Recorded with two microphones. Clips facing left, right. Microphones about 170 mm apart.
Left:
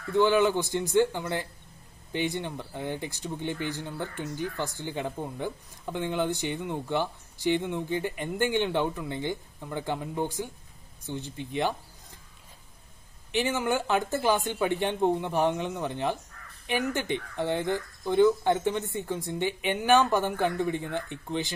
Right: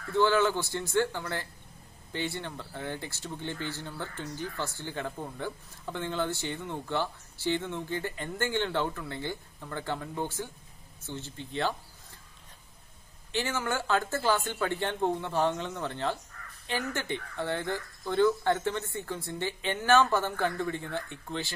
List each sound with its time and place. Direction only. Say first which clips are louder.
0.1 s speech: left 3 dB; 15° left (ahead or behind)
13.3 s speech: left 4 dB; 20° left (ahead or behind)